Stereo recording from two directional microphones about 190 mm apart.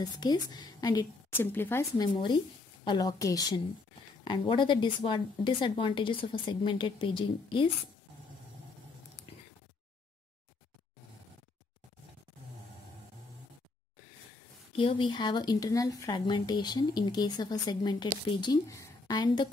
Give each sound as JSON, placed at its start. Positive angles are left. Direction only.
{"t": 0.0, "sound": "a woman's voice", "side_deg": 20}
{"t": 2.1, "sound": "a woman's voice", "side_deg": 25}
{"t": 14.8, "sound": "a woman's voice", "side_deg": 25}